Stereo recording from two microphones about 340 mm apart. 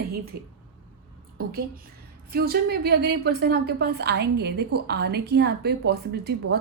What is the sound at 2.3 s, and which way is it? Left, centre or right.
A woman's voice, right.